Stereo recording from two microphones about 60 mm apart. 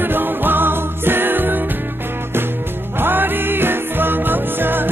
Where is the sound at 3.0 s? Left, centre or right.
Right.